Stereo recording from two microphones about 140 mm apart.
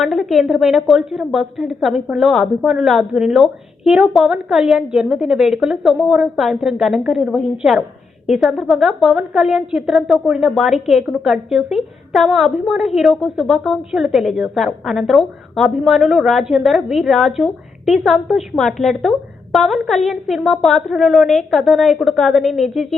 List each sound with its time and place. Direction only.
0.0 s a woman's voice: centre (ahead or behind)